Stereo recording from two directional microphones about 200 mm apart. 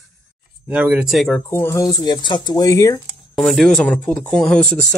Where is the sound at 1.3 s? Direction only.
10° left (ahead or behind).